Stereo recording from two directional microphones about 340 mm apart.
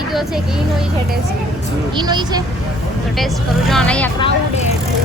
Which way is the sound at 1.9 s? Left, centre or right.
Centre.